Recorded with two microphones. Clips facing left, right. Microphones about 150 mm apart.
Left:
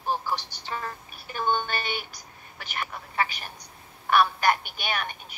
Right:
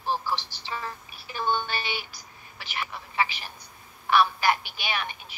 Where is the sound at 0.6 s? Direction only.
50° left (ahead or behind).